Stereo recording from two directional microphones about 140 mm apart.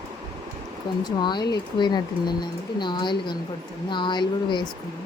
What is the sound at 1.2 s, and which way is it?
Speech, 30° left (ahead or behind).